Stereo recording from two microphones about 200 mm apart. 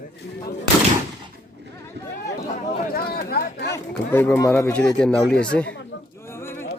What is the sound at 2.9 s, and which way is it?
Chatter, 50° left (ahead or behind).